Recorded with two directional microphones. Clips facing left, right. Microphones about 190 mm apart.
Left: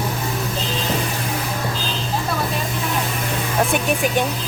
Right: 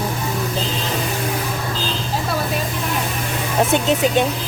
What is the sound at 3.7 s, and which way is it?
Speech, 25° right (ahead or behind).